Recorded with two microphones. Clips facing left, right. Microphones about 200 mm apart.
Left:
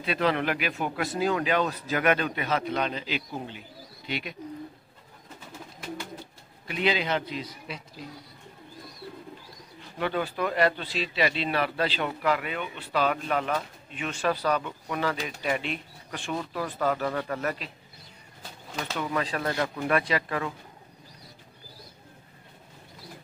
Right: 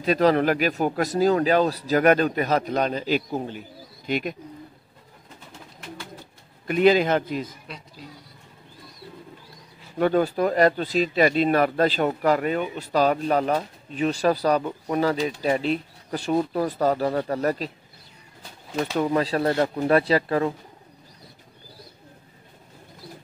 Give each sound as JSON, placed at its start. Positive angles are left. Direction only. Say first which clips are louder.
{"t": 0.0, "sound": "speech", "louder": "right 7 dB", "side_deg": -40}
{"t": 6.7, "sound": "a man's voice", "louder": "right 9 dB", "side_deg": -45}
{"t": 7.6, "sound": "speech", "louder": "left 1 dB", "side_deg": 0}
{"t": 9.9, "sound": "speech", "louder": "right 8 dB", "side_deg": -45}
{"t": 18.8, "sound": "speech", "louder": "right 8 dB", "side_deg": -35}